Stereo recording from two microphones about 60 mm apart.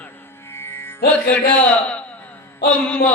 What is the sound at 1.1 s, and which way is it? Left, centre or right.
Mantra, left.